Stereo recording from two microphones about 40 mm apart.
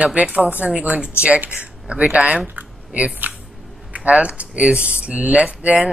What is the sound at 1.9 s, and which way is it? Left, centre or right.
Speech, right.